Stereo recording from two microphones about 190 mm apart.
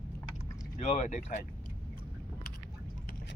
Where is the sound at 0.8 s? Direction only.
35° left (ahead or behind).